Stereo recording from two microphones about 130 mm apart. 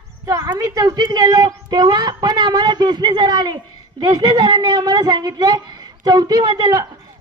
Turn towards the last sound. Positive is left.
turn(degrees=-35)  # may be behind; listen again after turning